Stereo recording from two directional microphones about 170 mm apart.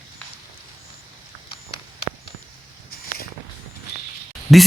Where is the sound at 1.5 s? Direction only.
35° left (ahead or behind).